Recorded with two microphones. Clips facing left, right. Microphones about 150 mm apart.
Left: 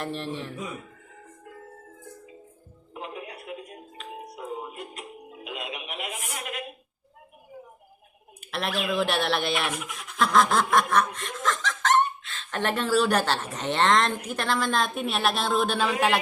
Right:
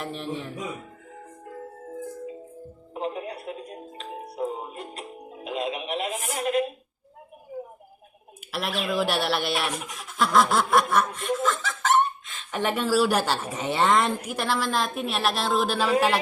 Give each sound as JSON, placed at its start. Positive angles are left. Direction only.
{"t": 0.0, "sound": "a woman's voice", "side_deg": 0}
{"t": 2.9, "sound": "music", "side_deg": -35}
{"t": 6.3, "sound": "a sound", "side_deg": -30}
{"t": 8.5, "sound": "a woman's voice", "side_deg": 0}
{"t": 9.9, "sound": "snicker", "side_deg": 0}
{"t": 14.3, "sound": "a woman's voice", "side_deg": -5}